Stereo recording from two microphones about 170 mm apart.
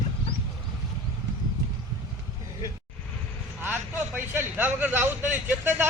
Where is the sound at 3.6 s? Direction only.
10° right (ahead or behind).